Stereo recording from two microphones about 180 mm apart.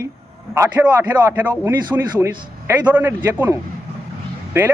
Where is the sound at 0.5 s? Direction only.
10° right (ahead or behind).